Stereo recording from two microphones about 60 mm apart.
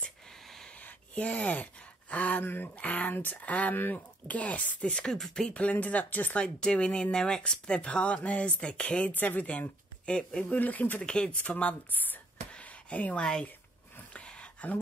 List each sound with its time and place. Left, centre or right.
0.0 s a sound: centre
0.7 s a sound: left
2.4 s speech: left
4.9 s speech: centre
5.5 s speech: left
6.3 s speech: centre
10.6 s speech: left
11.1 s speech: centre
11.5 s speech: left
12.5 s a sound: left
13.2 s speech: centre
14.1 s a sound: centre